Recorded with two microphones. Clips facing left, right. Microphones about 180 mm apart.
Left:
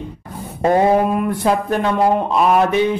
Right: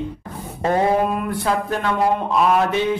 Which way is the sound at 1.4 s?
20° left (ahead or behind).